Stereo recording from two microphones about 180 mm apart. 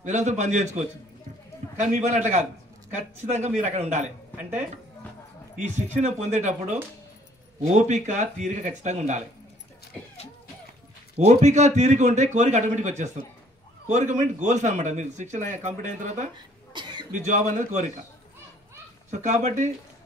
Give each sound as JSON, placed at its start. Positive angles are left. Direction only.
{"t": 0.0, "sound": "a man's voice", "side_deg": -40}
{"t": 5.6, "sound": "a man's voice", "side_deg": -40}
{"t": 11.1, "sound": "a man's voice", "side_deg": -40}
{"t": 16.7, "sound": "cough", "side_deg": -25}
{"t": 17.1, "sound": "speech", "side_deg": -40}
{"t": 19.0, "sound": "a man's voice", "side_deg": -40}